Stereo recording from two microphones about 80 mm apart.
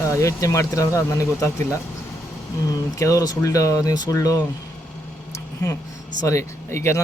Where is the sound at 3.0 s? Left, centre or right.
Left.